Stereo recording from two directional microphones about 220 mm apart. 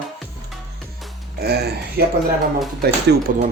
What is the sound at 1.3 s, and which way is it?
Speech, 45° right (ahead or behind).